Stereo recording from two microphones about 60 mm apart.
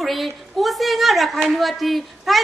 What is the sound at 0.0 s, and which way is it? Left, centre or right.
A woman's voice, centre.